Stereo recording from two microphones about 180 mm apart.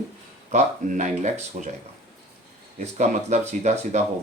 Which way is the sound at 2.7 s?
40° right (ahead or behind).